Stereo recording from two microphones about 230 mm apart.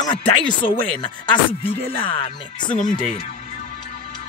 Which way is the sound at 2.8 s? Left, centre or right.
Left.